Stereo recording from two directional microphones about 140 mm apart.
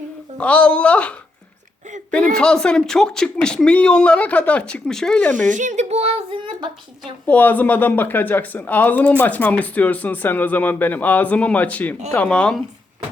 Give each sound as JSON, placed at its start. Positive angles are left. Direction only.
{"t": 0.3, "sound": "speech", "side_deg": 10}
{"t": 5.5, "sound": "speech", "side_deg": -60}
{"t": 7.3, "sound": "speech", "side_deg": 10}